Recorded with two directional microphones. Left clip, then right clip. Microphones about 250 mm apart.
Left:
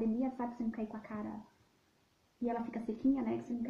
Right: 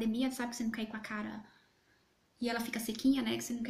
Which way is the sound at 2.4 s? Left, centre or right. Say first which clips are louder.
Right 1 dB; right.